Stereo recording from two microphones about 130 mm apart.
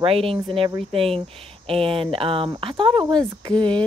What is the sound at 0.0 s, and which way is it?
Speech, 50° right (ahead or behind).